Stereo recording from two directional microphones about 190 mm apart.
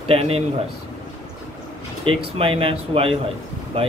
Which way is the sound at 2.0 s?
30° right (ahead or behind).